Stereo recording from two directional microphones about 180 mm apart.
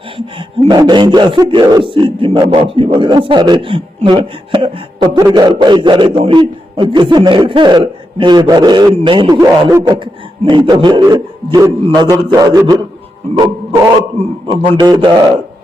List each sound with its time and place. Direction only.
0.3 s speech: 30° right (ahead or behind)